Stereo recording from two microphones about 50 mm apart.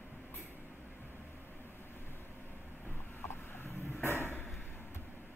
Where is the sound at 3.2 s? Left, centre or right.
Left.